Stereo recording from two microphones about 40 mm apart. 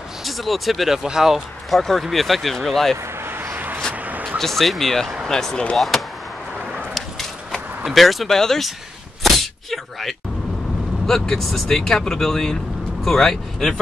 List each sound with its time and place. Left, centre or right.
0.2 s speech: centre
1.7 s speech: centre
3.3 s vehicle: right
4.4 s speech: centre
6.9 s a sound: centre
7.9 s speech: centre
9.2 s a sound: centre
11.1 s speech: centre